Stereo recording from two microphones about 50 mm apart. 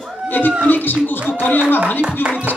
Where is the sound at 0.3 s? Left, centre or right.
Left.